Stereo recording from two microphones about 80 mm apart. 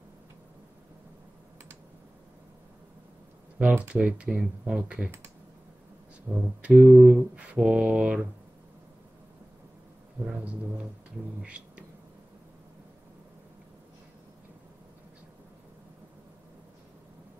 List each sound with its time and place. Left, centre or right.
3.5 s speech: centre
6.3 s a sound: centre
6.6 s speech: centre
11.4 s insect: centre